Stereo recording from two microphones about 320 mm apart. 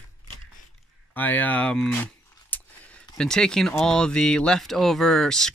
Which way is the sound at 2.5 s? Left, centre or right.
Centre.